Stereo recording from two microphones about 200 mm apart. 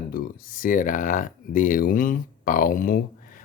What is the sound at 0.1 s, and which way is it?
Speech, 40° left (ahead or behind).